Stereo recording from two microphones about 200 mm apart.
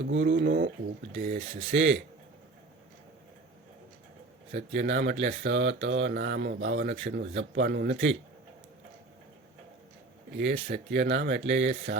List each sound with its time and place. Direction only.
0.0 s speech: 55° right (ahead or behind); by 1.5 s 40° right (ahead or behind)
1.7 s a man's voice: 65° right (ahead or behind)
4.5 s speech: 60° right (ahead or behind)
10.3 s speech: 60° right (ahead or behind)